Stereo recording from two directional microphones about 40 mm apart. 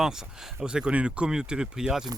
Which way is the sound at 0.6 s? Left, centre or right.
Right.